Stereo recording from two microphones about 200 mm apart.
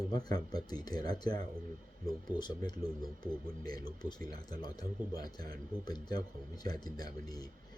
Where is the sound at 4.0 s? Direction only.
20° left (ahead or behind).